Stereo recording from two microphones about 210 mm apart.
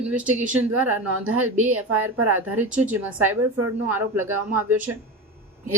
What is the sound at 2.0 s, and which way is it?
Speech, 90° right.